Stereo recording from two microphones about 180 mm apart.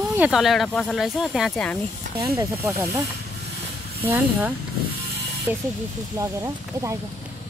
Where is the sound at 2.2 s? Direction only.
15° right (ahead or behind).